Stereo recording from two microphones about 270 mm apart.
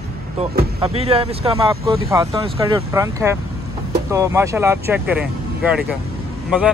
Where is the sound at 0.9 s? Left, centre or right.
Right.